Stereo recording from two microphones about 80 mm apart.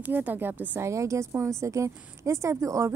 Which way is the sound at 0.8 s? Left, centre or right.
Right.